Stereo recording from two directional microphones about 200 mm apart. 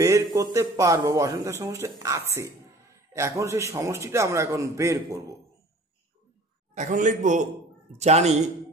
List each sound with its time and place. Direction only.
0.0 s a man's voice: 15° right (ahead or behind)
6.7 s a man's voice: 40° right (ahead or behind)